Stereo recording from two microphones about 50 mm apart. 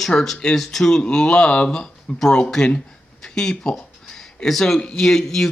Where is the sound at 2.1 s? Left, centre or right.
Centre.